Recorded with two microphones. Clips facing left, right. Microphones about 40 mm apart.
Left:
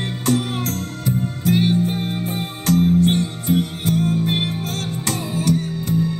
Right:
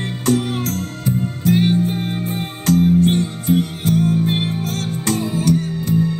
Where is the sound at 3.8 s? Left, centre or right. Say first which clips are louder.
Right 4 dB; left.